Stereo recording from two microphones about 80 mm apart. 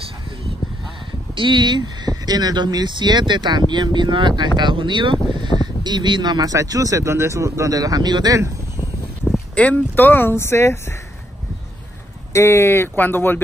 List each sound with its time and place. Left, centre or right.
1.3 s speech: right
6.5 s speech: right
9.6 s speech: left
12.3 s speech: left